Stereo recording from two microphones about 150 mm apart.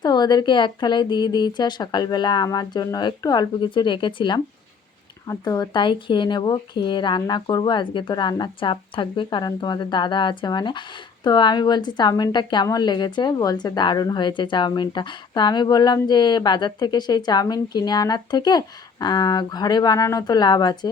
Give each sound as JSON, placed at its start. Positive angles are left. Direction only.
{"t": 0.0, "sound": "speech", "side_deg": 30}